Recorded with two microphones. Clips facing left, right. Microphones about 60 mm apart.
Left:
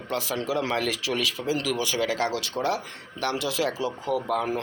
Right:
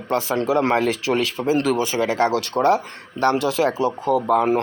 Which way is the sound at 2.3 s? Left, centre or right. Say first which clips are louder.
Right 9 dB; right.